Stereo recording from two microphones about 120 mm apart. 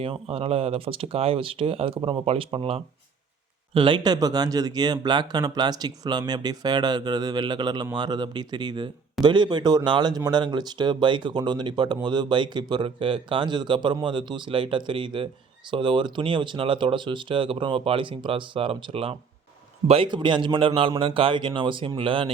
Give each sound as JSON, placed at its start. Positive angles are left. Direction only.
{"t": 0.0, "sound": "speech", "side_deg": -50}
{"t": 2.0, "sound": "speech", "side_deg": -35}
{"t": 2.2, "sound": "speech", "side_deg": -50}
{"t": 20.1, "sound": "speech", "side_deg": -40}